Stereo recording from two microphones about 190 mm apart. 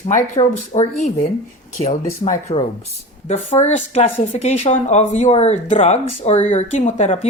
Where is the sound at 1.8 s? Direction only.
35° left (ahead or behind).